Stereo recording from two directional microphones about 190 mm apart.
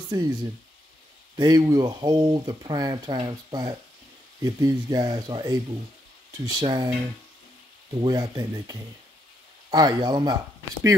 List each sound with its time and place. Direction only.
0.1 s speech: 20° right (ahead or behind)
1.3 s speech: 25° right (ahead or behind)
8.0 s speech: 20° right (ahead or behind)